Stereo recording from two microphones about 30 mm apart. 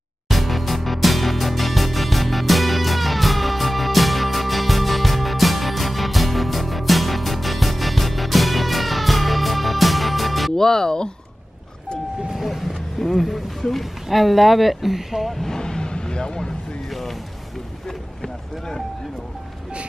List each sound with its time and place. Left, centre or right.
0.3 s music: centre
10.5 s music: centre
12.4 s music: centre
14.0 s speech: centre
15.4 s vehicle: left
17.8 s run: centre